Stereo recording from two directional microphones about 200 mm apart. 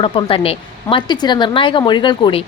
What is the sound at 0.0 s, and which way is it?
Speech, 25° left (ahead or behind).